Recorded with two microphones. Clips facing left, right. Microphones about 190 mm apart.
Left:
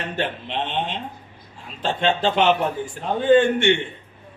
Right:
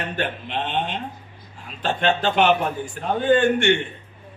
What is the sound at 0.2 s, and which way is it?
A man's voice, 25° left (ahead or behind).